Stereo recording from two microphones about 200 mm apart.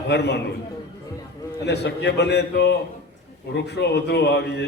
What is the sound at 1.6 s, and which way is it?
A man's voice, 55° left (ahead or behind).